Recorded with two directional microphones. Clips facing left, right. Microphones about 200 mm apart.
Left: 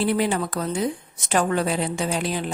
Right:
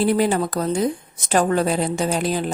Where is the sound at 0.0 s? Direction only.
40° right (ahead or behind).